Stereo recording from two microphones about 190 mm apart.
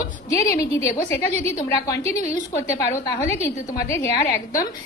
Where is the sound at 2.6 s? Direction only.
15° left (ahead or behind).